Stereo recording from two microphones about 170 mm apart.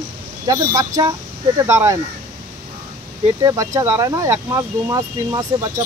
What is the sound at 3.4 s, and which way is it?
Speech, 20° right (ahead or behind).